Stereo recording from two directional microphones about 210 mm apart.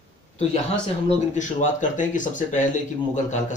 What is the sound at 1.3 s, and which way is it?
Speech, 35° left (ahead or behind).